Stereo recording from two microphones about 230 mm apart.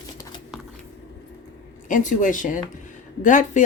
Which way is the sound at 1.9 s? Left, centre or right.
Left.